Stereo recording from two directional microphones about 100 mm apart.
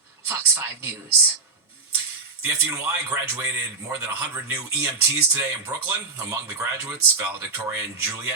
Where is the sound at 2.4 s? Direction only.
25° right (ahead or behind).